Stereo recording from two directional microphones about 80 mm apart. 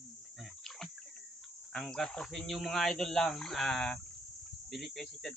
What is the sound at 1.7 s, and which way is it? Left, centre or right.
Speech, centre.